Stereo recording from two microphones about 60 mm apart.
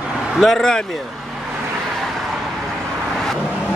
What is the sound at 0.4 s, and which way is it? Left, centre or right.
Speech, centre.